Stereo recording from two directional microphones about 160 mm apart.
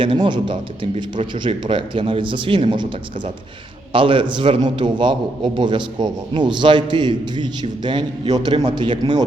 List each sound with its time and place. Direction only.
0.0 s a man's voice: 30° right (ahead or behind)
3.9 s a man's voice: 35° right (ahead or behind)